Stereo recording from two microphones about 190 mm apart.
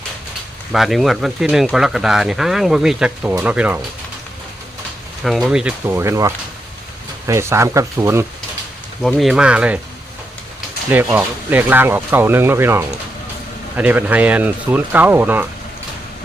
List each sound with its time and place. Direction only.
0.7 s speech: centre (ahead or behind)
5.2 s speech: centre (ahead or behind)
9.0 s speech: centre (ahead or behind)
10.8 s speech: 10° right (ahead or behind)